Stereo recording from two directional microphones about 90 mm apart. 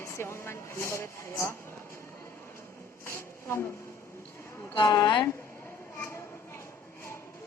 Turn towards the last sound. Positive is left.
turn(degrees=30)  # may be behind; listen again after turning